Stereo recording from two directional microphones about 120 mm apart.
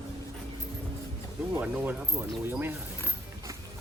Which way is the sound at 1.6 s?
10° right (ahead or behind).